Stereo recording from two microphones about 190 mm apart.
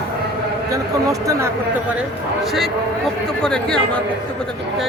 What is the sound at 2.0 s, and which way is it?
Speech, centre (ahead or behind).